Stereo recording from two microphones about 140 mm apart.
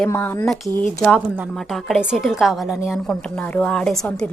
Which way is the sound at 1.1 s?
10° right (ahead or behind).